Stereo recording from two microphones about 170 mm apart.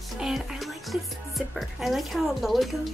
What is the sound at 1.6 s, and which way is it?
Speech, centre (ahead or behind).